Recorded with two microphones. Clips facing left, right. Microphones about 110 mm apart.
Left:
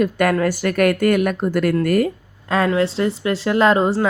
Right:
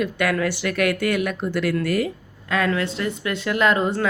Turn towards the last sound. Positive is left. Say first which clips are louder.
# left 4 dB
turn(degrees=30)  # may be behind; listen again after turning